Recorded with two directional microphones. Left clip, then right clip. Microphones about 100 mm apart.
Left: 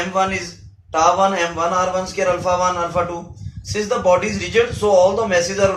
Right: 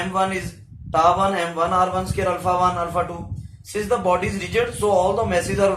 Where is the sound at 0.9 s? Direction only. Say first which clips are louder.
Left 2 dB; 55° right (ahead or behind).